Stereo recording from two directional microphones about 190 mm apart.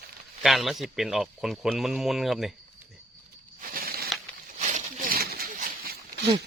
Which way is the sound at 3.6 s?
50° right (ahead or behind).